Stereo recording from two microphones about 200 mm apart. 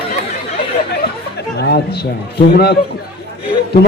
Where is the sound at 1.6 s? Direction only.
55° left (ahead or behind).